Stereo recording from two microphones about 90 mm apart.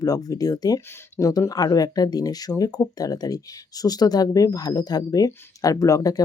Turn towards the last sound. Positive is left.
turn(degrees=40)  # may be behind; listen again after turning